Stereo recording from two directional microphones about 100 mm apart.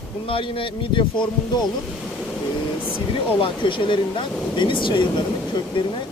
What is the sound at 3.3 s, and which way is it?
Speech, 60° left (ahead or behind).